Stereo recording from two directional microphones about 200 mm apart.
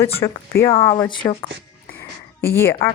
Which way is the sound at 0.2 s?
15° left (ahead or behind).